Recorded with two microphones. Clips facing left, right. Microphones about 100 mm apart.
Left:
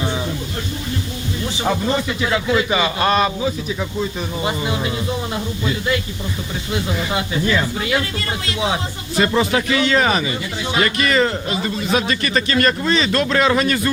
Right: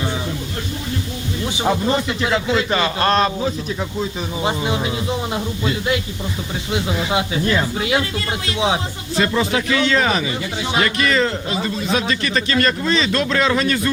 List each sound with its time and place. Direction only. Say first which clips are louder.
1.5 s speech: right 1 dB; 15° right (ahead or behind)
2.6 s a man's voice: even; 5° left (ahead or behind)
4.4 s speech: right 2 dB; 25° right (ahead or behind)
9.1 s a man's voice: left 2 dB; 10° left (ahead or behind)